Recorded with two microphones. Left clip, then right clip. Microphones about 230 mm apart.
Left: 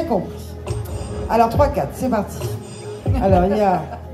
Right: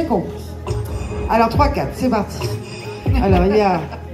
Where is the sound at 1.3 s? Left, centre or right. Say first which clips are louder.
Even; left.